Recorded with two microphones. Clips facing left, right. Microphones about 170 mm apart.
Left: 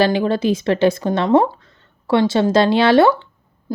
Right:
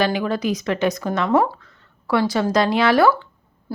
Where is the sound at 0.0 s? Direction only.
30° left (ahead or behind).